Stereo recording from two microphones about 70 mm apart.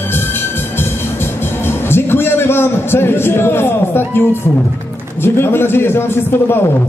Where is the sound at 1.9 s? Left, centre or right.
Left.